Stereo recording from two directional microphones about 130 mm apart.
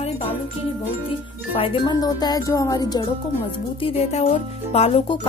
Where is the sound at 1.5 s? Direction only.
45° left (ahead or behind).